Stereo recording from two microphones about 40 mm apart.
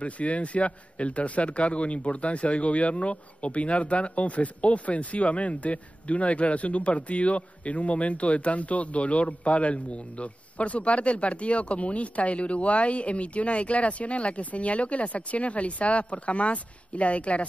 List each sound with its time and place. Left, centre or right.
0.0 s speech: left